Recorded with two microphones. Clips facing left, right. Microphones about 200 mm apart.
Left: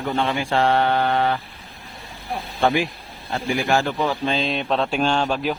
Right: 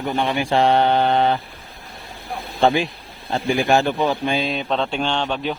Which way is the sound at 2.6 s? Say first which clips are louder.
Right 2 dB; 25° right (ahead or behind).